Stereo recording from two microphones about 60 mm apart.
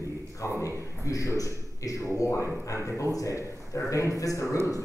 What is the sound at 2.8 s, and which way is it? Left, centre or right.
A man's voice, left.